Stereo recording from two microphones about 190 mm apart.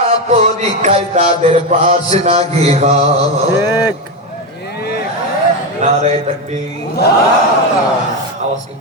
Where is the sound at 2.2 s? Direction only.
35° right (ahead or behind).